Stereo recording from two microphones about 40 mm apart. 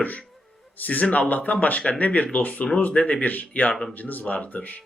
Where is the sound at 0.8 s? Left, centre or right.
Left.